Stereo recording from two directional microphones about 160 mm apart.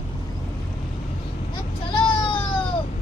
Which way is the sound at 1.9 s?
30° left (ahead or behind).